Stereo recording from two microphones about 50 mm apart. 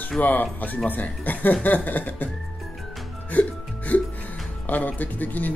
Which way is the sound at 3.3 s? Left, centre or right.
Left.